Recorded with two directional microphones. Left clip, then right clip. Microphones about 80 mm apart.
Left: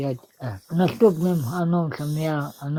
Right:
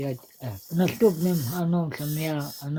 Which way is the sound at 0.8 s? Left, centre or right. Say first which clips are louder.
Left 3 dB; left.